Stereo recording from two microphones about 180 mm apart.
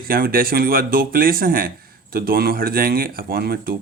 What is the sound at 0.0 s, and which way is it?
Speech, 55° right (ahead or behind).